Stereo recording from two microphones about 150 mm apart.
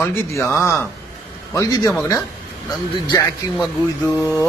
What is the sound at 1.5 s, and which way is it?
Speech, 20° left (ahead or behind).